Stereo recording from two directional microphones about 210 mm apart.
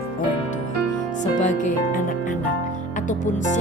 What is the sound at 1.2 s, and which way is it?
Speech, 35° left (ahead or behind).